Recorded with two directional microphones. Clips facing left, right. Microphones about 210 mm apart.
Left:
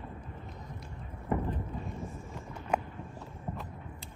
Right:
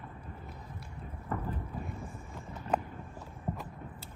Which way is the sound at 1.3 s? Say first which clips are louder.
Left 6 dB; 15° left (ahead or behind).